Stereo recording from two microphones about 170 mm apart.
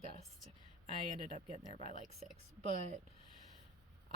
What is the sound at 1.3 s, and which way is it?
Speech, 40° right (ahead or behind).